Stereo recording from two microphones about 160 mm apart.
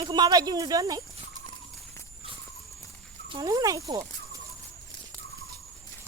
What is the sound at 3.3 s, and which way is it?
Speech, 20° right (ahead or behind).